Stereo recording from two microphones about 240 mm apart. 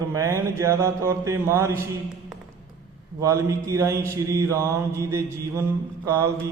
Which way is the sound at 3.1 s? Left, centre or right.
Centre.